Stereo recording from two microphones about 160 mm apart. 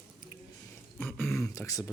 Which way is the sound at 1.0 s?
10° left (ahead or behind).